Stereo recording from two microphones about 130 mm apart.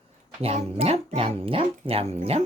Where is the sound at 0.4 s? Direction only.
55° right (ahead or behind).